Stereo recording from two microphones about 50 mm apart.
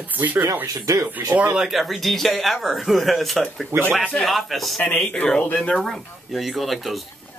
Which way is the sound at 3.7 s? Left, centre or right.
Right.